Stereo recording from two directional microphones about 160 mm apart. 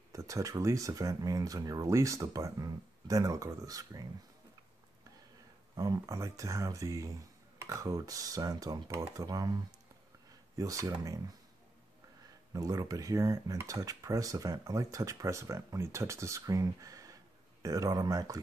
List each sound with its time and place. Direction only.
0.1 s speech: 20° right (ahead or behind)
5.8 s speech: 20° right (ahead or behind)
12.5 s speech: 20° right (ahead or behind)